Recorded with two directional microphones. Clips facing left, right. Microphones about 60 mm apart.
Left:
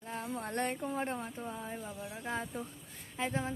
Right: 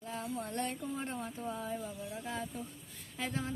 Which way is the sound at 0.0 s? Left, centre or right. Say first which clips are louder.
Even; left.